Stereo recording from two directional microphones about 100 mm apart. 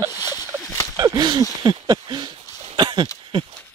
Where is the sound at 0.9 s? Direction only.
40° right (ahead or behind).